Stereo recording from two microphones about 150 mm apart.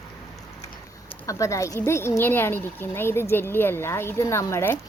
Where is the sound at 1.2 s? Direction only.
20° left (ahead or behind).